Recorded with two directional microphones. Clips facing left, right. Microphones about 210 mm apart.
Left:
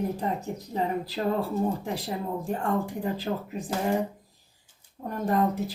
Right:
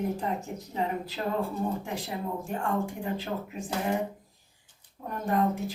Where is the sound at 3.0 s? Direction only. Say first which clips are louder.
Left 3 dB; 35° left (ahead or behind).